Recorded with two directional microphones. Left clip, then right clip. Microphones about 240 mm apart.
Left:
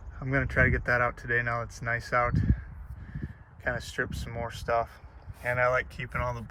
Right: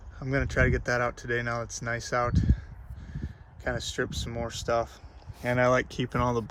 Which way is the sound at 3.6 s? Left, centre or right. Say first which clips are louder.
Even; centre.